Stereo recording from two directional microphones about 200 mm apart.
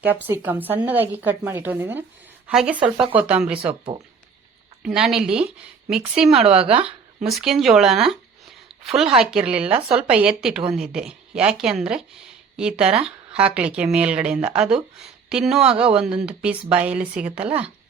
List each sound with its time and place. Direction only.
0.0 s a woman's voice: 10° right (ahead or behind)
4.8 s speech: centre (ahead or behind)
6.5 s a woman's voice: 30° right (ahead or behind)
7.3 s a woman's voice: centre (ahead or behind)